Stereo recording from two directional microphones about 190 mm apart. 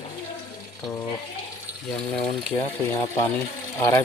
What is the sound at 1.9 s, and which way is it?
Speech, 5° left (ahead or behind).